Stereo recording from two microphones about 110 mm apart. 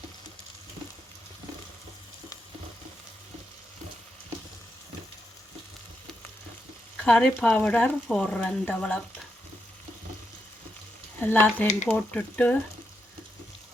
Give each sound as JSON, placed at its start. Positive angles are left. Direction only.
{"t": 6.9, "sound": "frying", "side_deg": 10}
{"t": 7.4, "sound": "speech", "side_deg": 10}
{"t": 11.2, "sound": "speech", "side_deg": 15}